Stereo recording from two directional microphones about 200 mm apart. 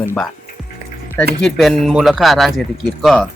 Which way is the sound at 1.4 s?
Centre (ahead or behind).